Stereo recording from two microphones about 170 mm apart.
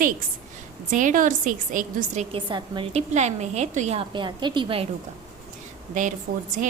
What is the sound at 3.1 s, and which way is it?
Speech, 45° right (ahead or behind).